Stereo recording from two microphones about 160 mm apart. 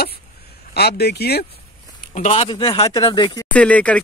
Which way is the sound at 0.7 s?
90° left.